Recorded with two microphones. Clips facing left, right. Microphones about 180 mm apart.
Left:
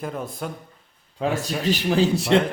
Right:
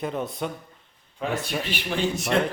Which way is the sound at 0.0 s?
Centre (ahead or behind).